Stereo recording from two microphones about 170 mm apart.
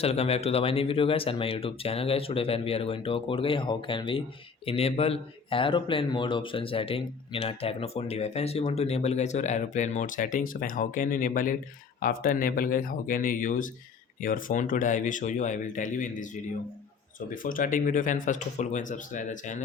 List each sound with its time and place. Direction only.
0.0 s speech: 35° left (ahead or behind)